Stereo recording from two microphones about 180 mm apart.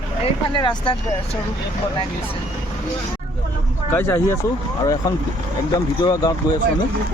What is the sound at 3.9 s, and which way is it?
Speech, 10° left (ahead or behind).